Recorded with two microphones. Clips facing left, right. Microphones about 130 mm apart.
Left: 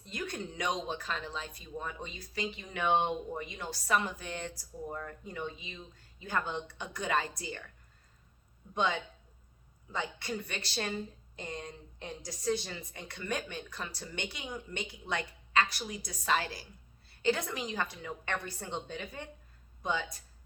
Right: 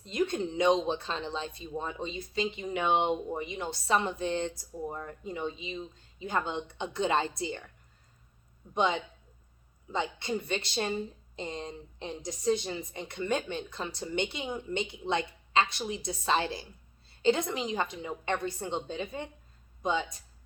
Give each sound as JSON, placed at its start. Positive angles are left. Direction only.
{"t": 0.0, "sound": "speech", "side_deg": -20}
{"t": 8.7, "sound": "speech", "side_deg": -20}